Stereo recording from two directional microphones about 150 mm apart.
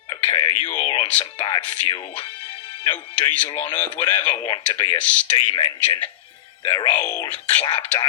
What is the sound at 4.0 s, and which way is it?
Speech, 30° left (ahead or behind).